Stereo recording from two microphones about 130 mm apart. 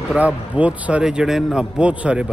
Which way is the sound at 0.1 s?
10° right (ahead or behind).